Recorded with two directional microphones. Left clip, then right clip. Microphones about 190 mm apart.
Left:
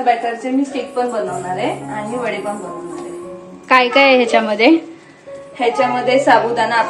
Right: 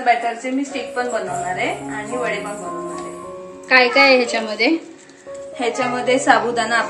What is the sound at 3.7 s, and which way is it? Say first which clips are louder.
A woman's voice: left 2 dB; 15° left (ahead or behind).